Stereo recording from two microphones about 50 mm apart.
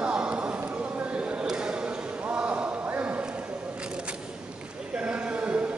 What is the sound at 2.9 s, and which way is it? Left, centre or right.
Clip-clop, right.